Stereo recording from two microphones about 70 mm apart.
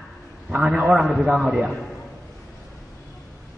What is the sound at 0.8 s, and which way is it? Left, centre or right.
Speech, centre.